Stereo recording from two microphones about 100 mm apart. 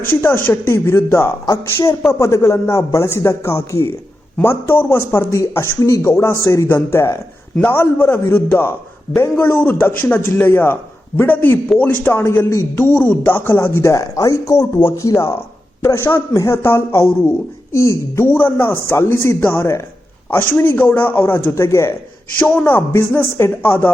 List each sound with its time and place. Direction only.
0.2 s a man's voice: 20° left (ahead or behind)
22.4 s a man's voice: 15° left (ahead or behind)